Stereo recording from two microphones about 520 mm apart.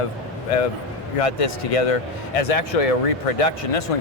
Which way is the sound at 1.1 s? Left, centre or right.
Left.